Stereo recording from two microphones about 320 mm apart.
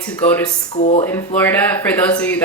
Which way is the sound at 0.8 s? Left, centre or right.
Left.